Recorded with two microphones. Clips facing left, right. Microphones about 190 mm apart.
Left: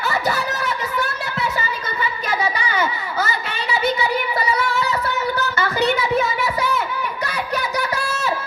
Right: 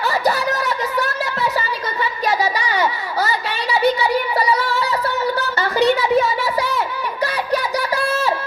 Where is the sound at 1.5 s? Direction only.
35° right (ahead or behind).